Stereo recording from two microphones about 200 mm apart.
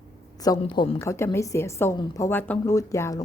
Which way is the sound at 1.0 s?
15° left (ahead or behind).